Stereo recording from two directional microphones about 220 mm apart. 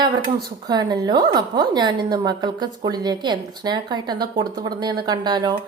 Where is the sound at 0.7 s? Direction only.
20° right (ahead or behind).